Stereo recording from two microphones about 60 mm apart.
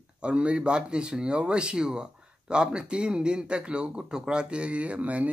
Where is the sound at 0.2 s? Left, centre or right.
Centre.